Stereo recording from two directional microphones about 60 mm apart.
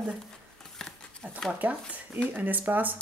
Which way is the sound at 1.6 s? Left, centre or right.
Right.